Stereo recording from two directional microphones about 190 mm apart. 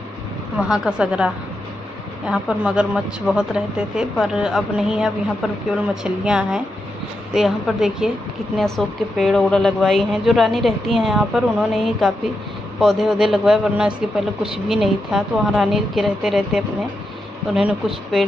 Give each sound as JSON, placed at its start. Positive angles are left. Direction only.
{"t": 0.6, "sound": "a woman's voice", "side_deg": -5}